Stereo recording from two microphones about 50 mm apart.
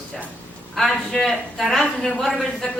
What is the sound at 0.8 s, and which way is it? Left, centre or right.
Speech, centre.